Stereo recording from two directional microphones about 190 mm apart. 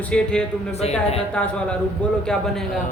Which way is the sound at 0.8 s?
35° left (ahead or behind).